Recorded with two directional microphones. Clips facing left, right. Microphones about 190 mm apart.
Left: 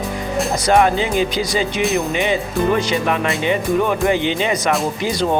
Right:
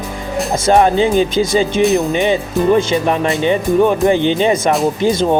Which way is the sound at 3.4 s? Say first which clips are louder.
Right 5 dB; 30° right (ahead or behind).